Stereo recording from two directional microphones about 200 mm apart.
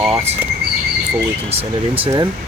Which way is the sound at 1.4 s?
30° right (ahead or behind).